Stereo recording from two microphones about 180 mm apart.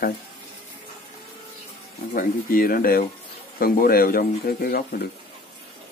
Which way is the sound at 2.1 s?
50° left (ahead or behind).